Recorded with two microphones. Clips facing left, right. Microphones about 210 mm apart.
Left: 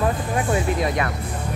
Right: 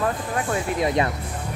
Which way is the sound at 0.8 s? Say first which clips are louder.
Right 2 dB; 25° right (ahead or behind).